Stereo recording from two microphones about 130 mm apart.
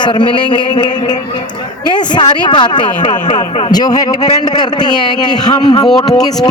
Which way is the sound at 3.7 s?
30° left (ahead or behind).